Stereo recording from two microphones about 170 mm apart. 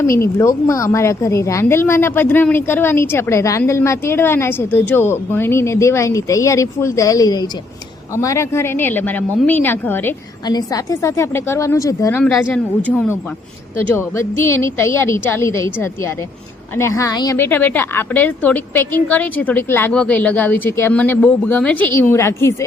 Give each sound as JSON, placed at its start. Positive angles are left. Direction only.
{"t": 0.0, "sound": "a woman's voice", "side_deg": 15}
{"t": 13.8, "sound": "a woman's voice", "side_deg": 15}